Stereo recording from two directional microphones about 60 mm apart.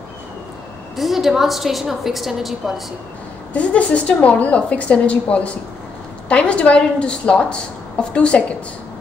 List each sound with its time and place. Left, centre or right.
0.9 s a woman's voice: centre
3.5 s a woman's voice: left